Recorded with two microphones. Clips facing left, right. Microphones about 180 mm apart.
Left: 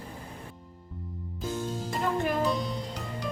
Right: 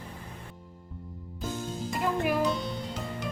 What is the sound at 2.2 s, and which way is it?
Music, 5° right (ahead or behind).